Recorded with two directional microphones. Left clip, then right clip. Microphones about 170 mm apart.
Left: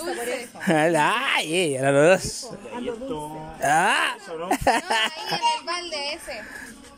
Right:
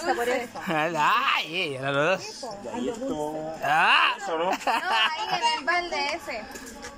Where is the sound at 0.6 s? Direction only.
50° left (ahead or behind).